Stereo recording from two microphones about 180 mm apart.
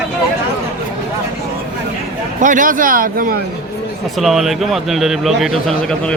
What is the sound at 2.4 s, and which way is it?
Speech, 45° right (ahead or behind).